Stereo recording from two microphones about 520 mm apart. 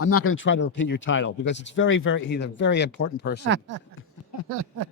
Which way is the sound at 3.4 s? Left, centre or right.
Right.